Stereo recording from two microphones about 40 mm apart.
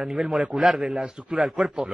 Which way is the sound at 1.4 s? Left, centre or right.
Centre.